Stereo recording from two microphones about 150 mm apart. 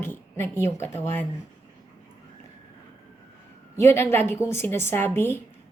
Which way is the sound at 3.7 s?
15° left (ahead or behind).